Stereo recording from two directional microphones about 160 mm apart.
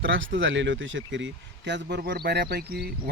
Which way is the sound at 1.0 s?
90° right.